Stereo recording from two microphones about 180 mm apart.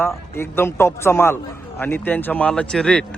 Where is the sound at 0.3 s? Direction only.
15° left (ahead or behind).